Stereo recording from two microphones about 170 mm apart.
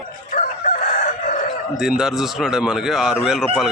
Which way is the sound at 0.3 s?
45° left (ahead or behind).